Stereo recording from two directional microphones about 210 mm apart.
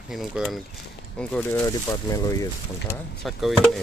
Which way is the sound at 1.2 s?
10° left (ahead or behind).